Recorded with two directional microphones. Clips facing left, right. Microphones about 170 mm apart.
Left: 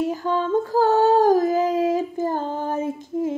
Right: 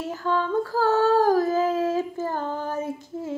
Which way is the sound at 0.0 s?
20° left (ahead or behind).